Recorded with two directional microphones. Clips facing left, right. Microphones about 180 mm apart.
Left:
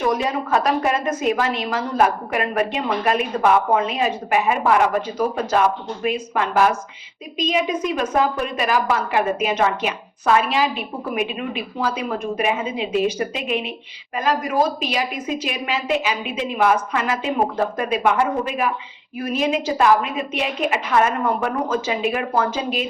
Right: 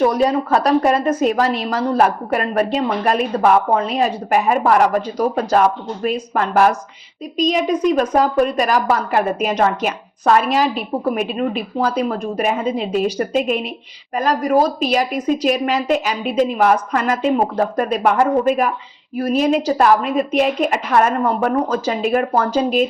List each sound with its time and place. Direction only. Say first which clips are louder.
0.1 s a woman's voice: right 4 dB; 35° right (ahead or behind)